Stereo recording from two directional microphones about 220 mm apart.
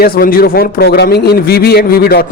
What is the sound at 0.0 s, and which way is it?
A man's voice, 40° left (ahead or behind).